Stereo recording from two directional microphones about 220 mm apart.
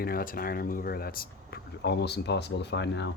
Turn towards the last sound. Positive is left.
turn(degrees=50)  # may be behind; listen again after turning